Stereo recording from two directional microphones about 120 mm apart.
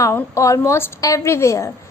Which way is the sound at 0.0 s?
20° left (ahead or behind).